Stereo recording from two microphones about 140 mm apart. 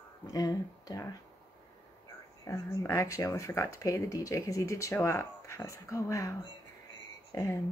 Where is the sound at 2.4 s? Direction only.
20° left (ahead or behind).